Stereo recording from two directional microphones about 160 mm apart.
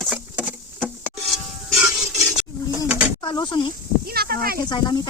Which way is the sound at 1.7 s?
15° right (ahead or behind).